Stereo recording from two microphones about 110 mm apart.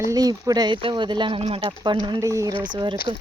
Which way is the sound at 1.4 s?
60° right (ahead or behind).